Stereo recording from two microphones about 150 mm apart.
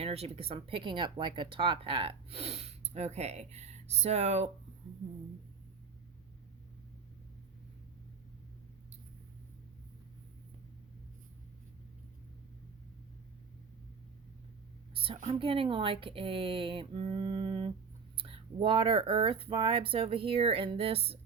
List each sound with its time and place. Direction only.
0.0 s speech: 45° right (ahead or behind)
14.9 s a sound: 40° right (ahead or behind)
15.4 s speech: 35° right (ahead or behind)